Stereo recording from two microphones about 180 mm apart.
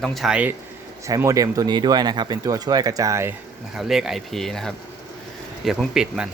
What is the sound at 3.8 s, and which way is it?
A man's voice, centre (ahead or behind).